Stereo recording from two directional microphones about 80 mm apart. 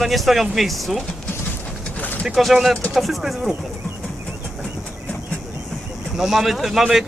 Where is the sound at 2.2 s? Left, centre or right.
Centre.